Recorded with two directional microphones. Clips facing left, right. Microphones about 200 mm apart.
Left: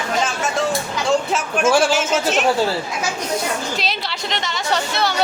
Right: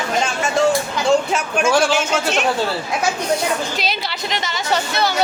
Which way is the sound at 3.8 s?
Centre (ahead or behind).